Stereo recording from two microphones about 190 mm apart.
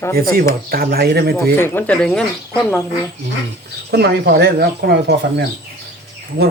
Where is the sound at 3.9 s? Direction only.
60° right (ahead or behind).